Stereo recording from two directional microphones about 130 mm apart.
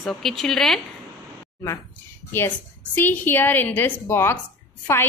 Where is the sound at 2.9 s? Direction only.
15° left (ahead or behind).